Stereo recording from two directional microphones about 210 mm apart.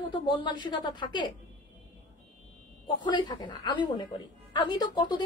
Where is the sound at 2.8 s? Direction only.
20° left (ahead or behind).